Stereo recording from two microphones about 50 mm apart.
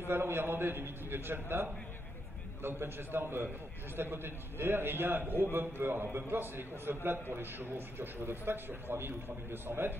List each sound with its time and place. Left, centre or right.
0.0 s a man's voice: right